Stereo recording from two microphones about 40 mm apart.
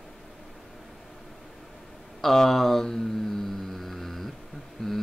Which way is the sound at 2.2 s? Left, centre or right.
Centre.